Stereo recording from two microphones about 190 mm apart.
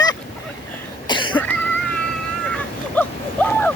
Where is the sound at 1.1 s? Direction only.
25° left (ahead or behind).